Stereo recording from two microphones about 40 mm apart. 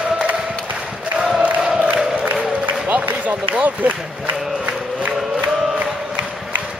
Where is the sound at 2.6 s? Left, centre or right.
Right.